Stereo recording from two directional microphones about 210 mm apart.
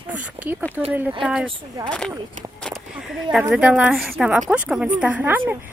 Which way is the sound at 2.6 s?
Centre (ahead or behind).